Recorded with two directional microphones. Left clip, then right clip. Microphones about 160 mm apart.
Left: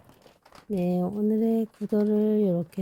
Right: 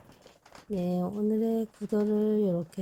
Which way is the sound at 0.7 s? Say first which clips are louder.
Left 4 dB; 15° left (ahead or behind).